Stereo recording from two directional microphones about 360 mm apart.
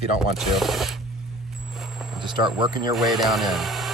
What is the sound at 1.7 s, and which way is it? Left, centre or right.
Vehicle, centre.